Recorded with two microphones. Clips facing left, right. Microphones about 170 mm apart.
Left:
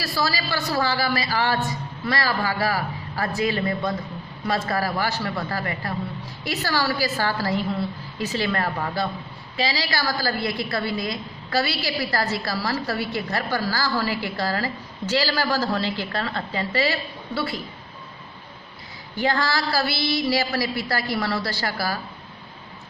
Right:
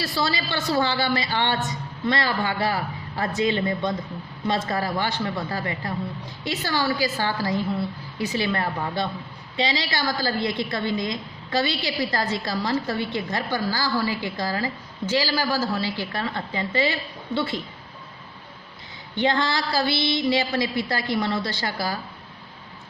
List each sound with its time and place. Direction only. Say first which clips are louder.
0.0 s a woman's voice: even; 25° right (ahead or behind)
19.2 s a woman's voice: even; 20° right (ahead or behind)